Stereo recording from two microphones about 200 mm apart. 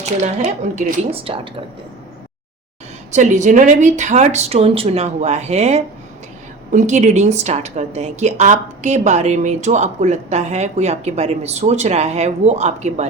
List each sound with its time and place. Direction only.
0.0 s a woman's voice: 35° right (ahead or behind)
3.1 s a woman's voice: 35° right (ahead or behind)